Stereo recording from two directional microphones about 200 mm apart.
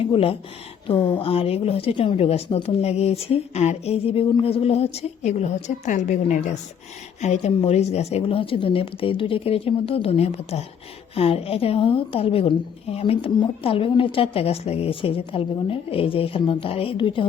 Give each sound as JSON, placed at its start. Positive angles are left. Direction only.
{"t": 0.0, "sound": "a woman's voice", "side_deg": 25}